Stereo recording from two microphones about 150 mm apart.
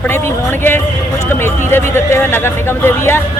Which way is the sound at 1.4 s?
15° left (ahead or behind).